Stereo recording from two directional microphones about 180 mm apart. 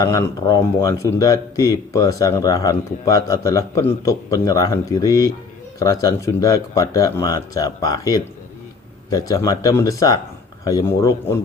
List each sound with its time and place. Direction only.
0.0 s a man's voice: 20° left (ahead or behind)